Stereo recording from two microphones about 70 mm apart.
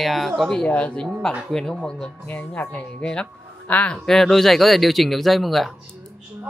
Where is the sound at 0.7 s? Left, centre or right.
Centre.